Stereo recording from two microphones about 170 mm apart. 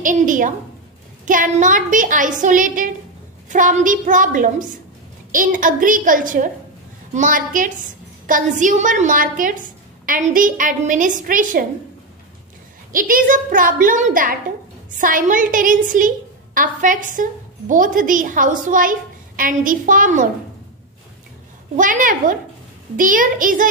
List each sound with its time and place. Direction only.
0.0 s a woman's voice: 50° right (ahead or behind)
12.9 s a woman's voice: 55° right (ahead or behind)
21.7 s a woman's voice: 50° right (ahead or behind)